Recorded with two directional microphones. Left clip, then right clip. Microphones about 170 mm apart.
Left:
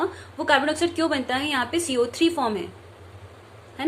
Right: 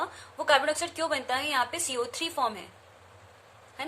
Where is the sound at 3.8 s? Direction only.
15° right (ahead or behind).